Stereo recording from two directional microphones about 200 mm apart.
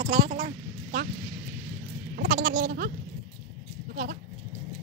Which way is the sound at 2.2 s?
45° right (ahead or behind).